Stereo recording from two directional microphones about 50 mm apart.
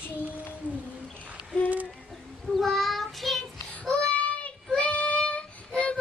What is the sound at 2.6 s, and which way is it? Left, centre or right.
Child singing, centre.